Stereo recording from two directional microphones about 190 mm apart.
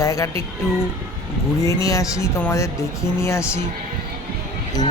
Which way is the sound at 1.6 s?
15° left (ahead or behind).